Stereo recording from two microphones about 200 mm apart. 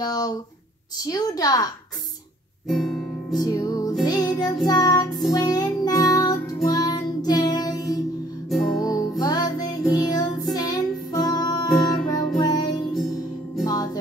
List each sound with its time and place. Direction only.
0.0 s a woman's voice: 20° left (ahead or behind)
2.7 s guitar: centre (ahead or behind)
3.3 s music: 15° left (ahead or behind)
4.0 s child singing: 20° left (ahead or behind)
5.3 s music: 20° left (ahead or behind)